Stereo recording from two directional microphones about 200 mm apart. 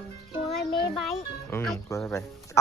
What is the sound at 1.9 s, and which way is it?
Speech, 15° left (ahead or behind).